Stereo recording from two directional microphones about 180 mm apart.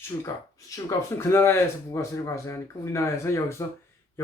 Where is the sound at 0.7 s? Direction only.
15° left (ahead or behind).